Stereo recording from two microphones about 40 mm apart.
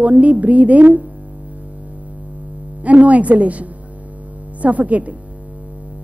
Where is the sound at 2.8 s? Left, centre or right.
Right.